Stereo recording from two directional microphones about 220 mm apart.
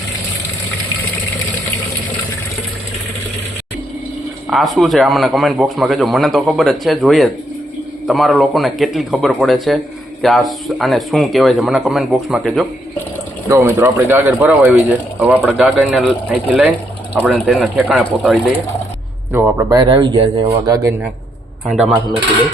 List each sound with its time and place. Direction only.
4.4 s speech: centre (ahead or behind)
13.5 s speech: 10° right (ahead or behind)
19.8 s speech: 20° right (ahead or behind)
21.7 s speech: centre (ahead or behind)